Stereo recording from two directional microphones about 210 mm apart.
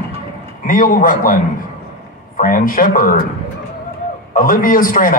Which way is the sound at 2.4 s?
40° left (ahead or behind).